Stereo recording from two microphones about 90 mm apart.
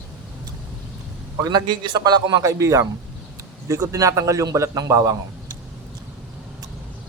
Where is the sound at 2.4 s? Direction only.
35° right (ahead or behind).